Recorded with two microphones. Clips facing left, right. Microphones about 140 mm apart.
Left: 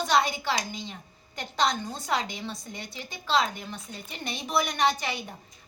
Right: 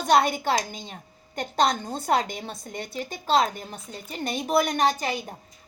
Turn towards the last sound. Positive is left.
turn(degrees=-40)  # may be behind; listen again after turning